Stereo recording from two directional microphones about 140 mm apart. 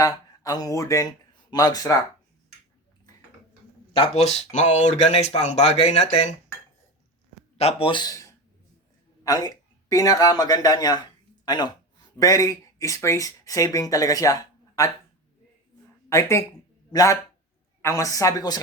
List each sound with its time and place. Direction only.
0.0 s speech: 25° left (ahead or behind)
3.9 s speech: 45° left (ahead or behind)
7.6 s a man's voice: 45° left (ahead or behind); by 14.8 s 25° left (ahead or behind)
16.0 s speech: 20° left (ahead or behind)